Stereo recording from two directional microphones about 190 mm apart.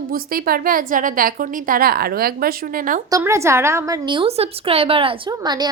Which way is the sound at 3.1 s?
15° right (ahead or behind).